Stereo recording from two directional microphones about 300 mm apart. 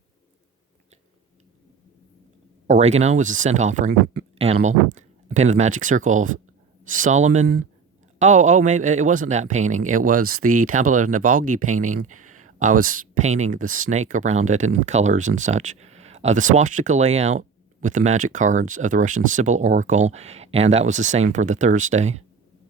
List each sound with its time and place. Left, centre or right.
2.6 s speech: right